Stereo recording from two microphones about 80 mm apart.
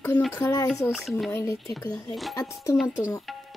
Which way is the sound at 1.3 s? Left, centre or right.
Left.